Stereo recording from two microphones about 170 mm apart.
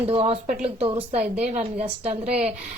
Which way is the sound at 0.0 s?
30° right (ahead or behind).